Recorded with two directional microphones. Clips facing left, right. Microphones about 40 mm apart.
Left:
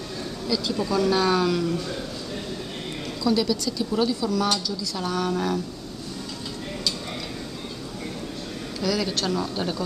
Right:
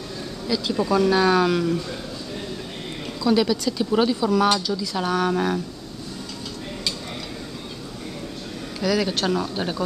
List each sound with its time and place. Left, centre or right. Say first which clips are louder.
0.5 s speech: right 3 dB; centre
3.3 s speech: right 3 dB; right
4.3 s speech: right 5 dB; centre
4.6 s speech: right 4 dB; right
5.1 s speech: right 3 dB; centre
8.8 s speech: right 3 dB; centre